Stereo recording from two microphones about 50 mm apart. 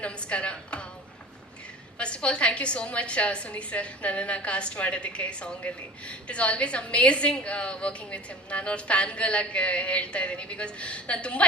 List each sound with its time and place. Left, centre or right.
0.0 s a woman's voice: left
2.0 s a woman's voice: left